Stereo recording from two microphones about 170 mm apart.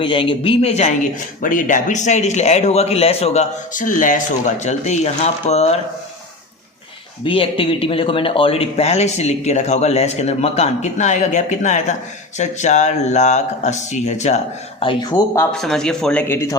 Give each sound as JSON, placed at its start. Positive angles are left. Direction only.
{"t": 0.0, "sound": "speech", "side_deg": 30}
{"t": 1.4, "sound": "a man's voice", "side_deg": 50}
{"t": 7.3, "sound": "a man's voice", "side_deg": 30}
{"t": 14.8, "sound": "speech", "side_deg": 30}
{"t": 15.5, "sound": "speech", "side_deg": 0}